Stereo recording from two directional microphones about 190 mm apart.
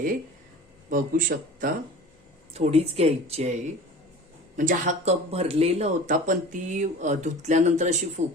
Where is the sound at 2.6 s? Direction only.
35° right (ahead or behind).